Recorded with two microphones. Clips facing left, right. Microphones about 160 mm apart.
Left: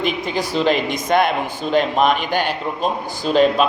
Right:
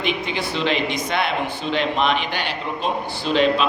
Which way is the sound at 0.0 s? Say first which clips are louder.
Left 3 dB; 40° left (ahead or behind).